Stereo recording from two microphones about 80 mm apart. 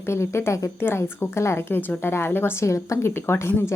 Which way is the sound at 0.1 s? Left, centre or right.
Left.